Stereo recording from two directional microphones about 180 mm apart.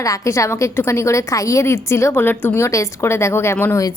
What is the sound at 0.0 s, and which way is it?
A woman's voice, 15° left (ahead or behind).